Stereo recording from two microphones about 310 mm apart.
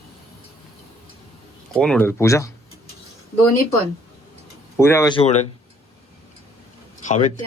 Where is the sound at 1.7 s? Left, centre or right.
Centre.